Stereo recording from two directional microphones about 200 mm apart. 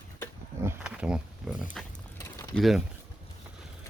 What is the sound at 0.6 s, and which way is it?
Speech, 5° right (ahead or behind).